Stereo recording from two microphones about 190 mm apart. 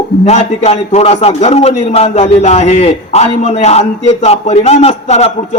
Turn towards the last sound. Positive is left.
turn(degrees=35)  # may be behind; listen again after turning